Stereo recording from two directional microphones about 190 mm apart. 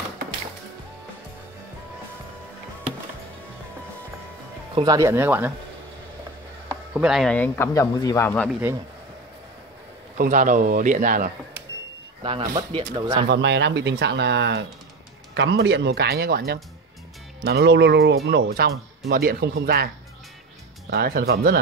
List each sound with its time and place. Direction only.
4.7 s speech: 20° right (ahead or behind)
6.9 s speech: 5° right (ahead or behind); by 8.5 s 15° left (ahead or behind)
8.5 s speech: 10° right (ahead or behind)
10.1 s speech: 45° right (ahead or behind)
12.2 s speech: 25° right (ahead or behind)
13.3 s speech: 65° right (ahead or behind)
20.9 s speech: 55° right (ahead or behind)